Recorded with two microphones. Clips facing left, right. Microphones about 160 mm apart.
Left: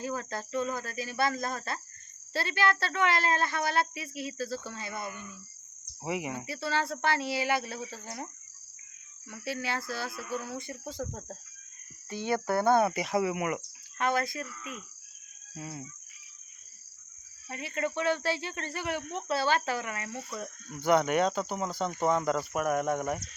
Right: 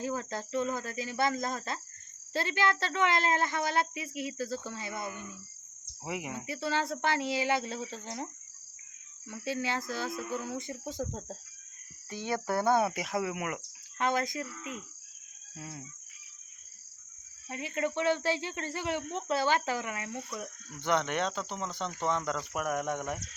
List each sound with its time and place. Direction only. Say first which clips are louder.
0.0 s speech: even; 20° right (ahead or behind)
6.1 s speech: left 4 dB; centre (ahead or behind)
6.4 s speech: even; 15° right (ahead or behind); by 13.6 s centre (ahead or behind)
14.0 s speech: left 1 dB; 15° right (ahead or behind)
15.5 s speech: left 3 dB; 5° left (ahead or behind)
17.5 s speech: even; 20° right (ahead or behind)
20.1 s speech: even; 5° left (ahead or behind)
20.8 s cricket: left 5 dB; 10° left (ahead or behind)
22.0 s speech: left 5 dB; 10° left (ahead or behind)